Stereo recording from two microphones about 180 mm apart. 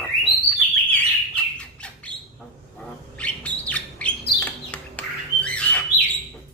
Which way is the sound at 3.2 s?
5° left (ahead or behind).